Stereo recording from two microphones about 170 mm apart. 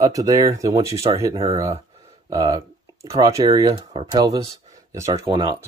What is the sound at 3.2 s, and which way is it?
Speech, 20° right (ahead or behind).